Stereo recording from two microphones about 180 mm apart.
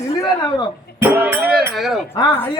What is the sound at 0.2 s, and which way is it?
Speech, 25° left (ahead or behind).